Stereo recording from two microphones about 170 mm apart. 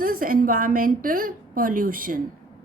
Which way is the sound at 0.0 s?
55° right (ahead or behind).